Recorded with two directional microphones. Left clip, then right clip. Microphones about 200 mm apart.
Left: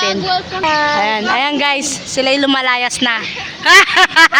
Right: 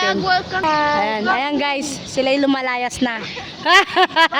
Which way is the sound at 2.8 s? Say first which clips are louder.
Left 6 dB; 25° right (ahead or behind).